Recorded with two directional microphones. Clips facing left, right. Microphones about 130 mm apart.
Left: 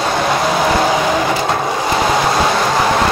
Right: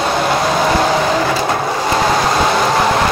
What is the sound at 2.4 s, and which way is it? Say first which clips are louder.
Vehicle: right 1 dB; centre (ahead or behind).